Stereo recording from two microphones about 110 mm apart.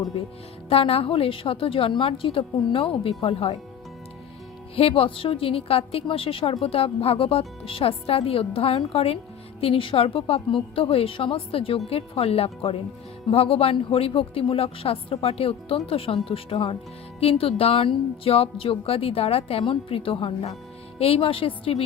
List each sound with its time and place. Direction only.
0.7 s a woman's voice: 60° left (ahead or behind)
4.7 s a woman's voice: 60° left (ahead or behind)